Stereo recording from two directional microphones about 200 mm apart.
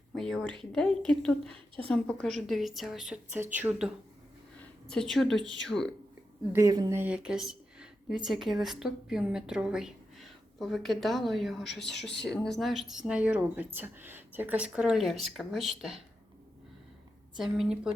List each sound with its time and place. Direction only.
0.1 s a woman's voice: centre (ahead or behind)
6.5 s speech: 15° right (ahead or behind)
7.0 s a woman's voice: 5° right (ahead or behind)
17.3 s a woman's voice: centre (ahead or behind)